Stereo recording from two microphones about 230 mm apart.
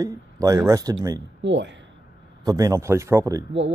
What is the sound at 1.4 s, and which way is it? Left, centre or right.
Speech, right.